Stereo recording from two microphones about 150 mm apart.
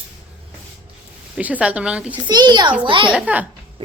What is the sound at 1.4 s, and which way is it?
Speech, 10° right (ahead or behind).